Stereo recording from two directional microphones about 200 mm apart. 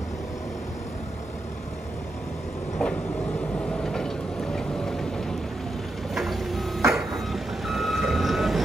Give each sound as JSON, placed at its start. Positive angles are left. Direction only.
{"t": 2.8, "sound": "train", "side_deg": 0}
{"t": 3.5, "sound": "vehicle", "side_deg": 5}
{"t": 6.9, "sound": "reversing beeps", "side_deg": 0}